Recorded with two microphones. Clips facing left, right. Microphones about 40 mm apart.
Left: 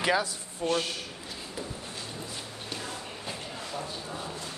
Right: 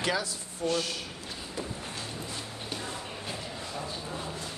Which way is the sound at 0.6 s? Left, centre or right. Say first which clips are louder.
Left 1 dB; left.